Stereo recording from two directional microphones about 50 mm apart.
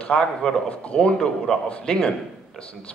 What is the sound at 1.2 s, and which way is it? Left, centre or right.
Speech, centre.